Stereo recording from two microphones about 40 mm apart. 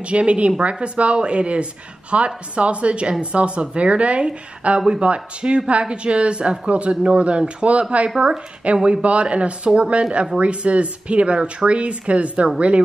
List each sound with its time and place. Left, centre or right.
0.0 s a woman's voice: right